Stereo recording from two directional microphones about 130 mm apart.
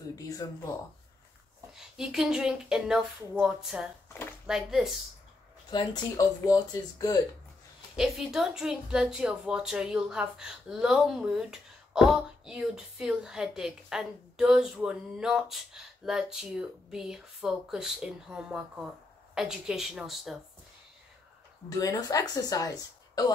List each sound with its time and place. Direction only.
0.1 s a sound: 30° left (ahead or behind)
1.7 s a woman's voice: 5° right (ahead or behind)
4.1 s a sound: 15° left (ahead or behind)
4.5 s a woman's voice: 5° right (ahead or behind)
5.7 s speech: 35° left (ahead or behind)
7.9 s a woman's voice: 5° right (ahead or behind)
21.6 s speech: 30° left (ahead or behind)